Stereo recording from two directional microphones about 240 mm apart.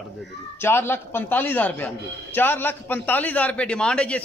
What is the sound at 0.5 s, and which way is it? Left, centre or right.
A man's voice, centre.